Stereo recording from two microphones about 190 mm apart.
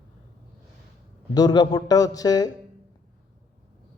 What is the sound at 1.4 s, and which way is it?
A man's voice, 20° left (ahead or behind).